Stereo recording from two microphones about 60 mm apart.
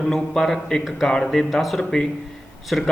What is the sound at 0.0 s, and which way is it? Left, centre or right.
A man's voice, centre.